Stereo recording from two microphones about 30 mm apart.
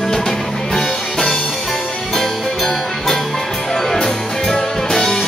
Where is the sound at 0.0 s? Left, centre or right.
Centre.